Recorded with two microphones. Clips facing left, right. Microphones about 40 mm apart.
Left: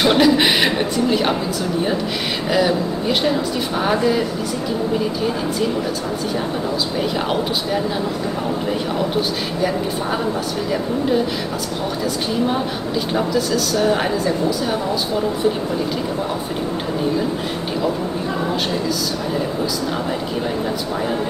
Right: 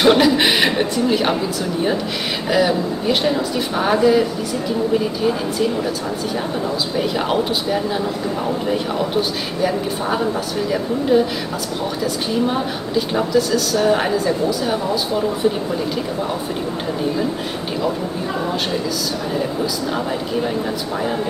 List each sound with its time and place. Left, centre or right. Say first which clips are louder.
0.0 s a woman's voice: right 1 dB; centre
2.5 s speech: right 1 dB; centre
7.0 s speech: right 3 dB; centre
12.4 s speech: even; centre